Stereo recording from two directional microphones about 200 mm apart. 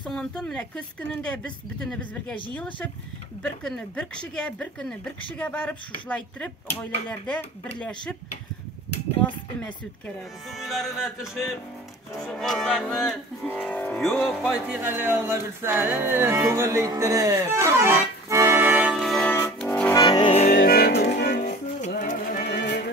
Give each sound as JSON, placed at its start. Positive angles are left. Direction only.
{"t": 0.0, "sound": "speech", "side_deg": 5}
{"t": 10.5, "sound": "speech", "side_deg": 0}
{"t": 13.8, "sound": "music", "side_deg": 0}
{"t": 19.9, "sound": "music", "side_deg": 20}
{"t": 20.5, "sound": "music", "side_deg": 50}
{"t": 21.8, "sound": "music", "side_deg": 40}